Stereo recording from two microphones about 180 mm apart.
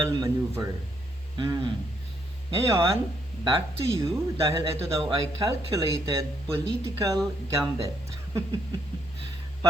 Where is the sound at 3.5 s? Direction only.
30° right (ahead or behind).